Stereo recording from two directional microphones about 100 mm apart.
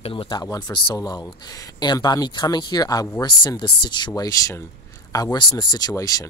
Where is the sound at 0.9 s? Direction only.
35° left (ahead or behind).